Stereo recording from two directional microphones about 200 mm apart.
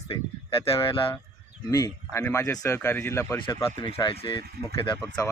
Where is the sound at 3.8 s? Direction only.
25° left (ahead or behind).